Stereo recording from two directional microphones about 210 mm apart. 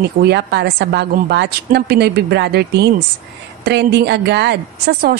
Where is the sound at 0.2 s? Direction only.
50° right (ahead or behind).